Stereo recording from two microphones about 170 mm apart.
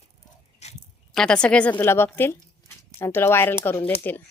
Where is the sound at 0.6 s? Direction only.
40° left (ahead or behind).